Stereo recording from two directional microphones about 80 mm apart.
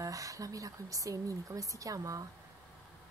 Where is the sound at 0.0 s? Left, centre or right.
Right.